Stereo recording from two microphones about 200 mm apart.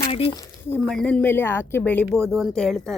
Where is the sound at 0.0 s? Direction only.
25° left (ahead or behind).